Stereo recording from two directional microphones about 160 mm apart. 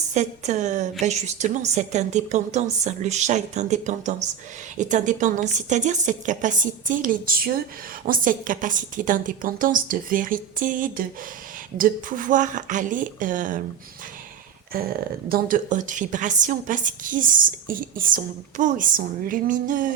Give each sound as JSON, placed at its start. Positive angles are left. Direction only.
{"t": 0.1, "sound": "a woman's voice", "side_deg": -45}
{"t": 14.7, "sound": "a woman's voice", "side_deg": -70}